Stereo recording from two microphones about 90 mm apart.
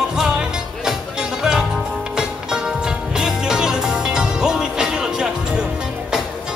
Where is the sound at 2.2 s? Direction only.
10° right (ahead or behind).